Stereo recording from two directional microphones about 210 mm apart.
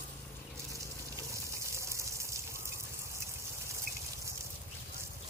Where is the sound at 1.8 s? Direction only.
15° right (ahead or behind).